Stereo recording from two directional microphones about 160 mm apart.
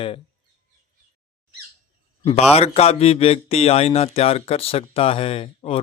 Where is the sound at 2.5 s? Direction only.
40° left (ahead or behind).